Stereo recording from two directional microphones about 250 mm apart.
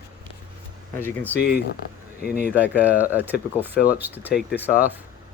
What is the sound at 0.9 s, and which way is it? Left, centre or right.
Speech, centre.